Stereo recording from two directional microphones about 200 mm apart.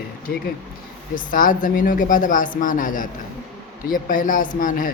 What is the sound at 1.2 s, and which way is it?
Speech, 45° left (ahead or behind).